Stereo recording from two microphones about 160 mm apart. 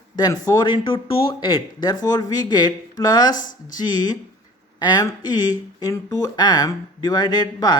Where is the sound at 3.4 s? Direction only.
55° left (ahead or behind).